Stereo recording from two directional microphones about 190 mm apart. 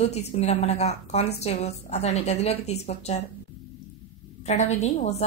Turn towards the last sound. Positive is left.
turn(degrees=35)  # may be behind; listen again after turning